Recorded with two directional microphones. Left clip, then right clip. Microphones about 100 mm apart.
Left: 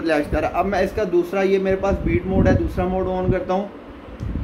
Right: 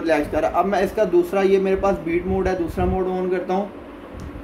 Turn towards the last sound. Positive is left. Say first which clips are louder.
# left 1 dB
turn(degrees=15)  # may be behind; listen again after turning